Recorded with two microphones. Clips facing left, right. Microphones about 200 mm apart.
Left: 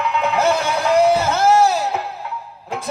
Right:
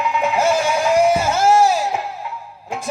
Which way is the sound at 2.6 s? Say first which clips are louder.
Even; 10° right (ahead or behind).